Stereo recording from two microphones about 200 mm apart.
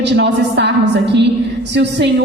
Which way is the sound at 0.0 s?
60° right (ahead or behind).